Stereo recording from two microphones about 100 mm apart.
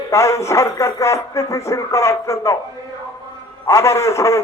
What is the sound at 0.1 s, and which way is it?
A man's voice, 30° left (ahead or behind).